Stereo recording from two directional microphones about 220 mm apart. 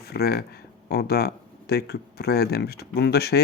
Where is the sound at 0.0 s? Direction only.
45° left (ahead or behind).